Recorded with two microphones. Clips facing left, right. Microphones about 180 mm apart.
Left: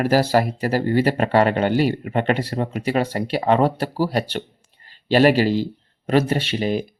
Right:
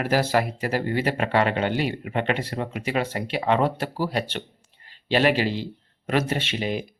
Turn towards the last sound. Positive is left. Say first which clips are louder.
# left 5 dB
turn(degrees=40)  # may be behind; listen again after turning